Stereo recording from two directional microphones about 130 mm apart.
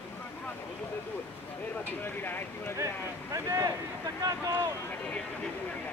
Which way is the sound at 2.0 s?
15° left (ahead or behind).